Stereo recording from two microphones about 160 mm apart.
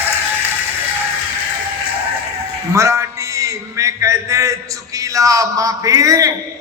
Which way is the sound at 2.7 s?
20° right (ahead or behind).